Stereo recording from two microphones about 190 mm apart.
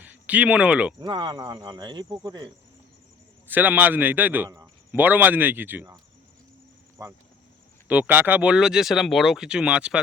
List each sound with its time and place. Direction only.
0.0 s speech: 10° right (ahead or behind)
0.9 s speech: 25° right (ahead or behind)
3.5 s a man's voice: 10° right (ahead or behind)
7.0 s speech: 20° right (ahead or behind)
7.9 s speech: 10° right (ahead or behind)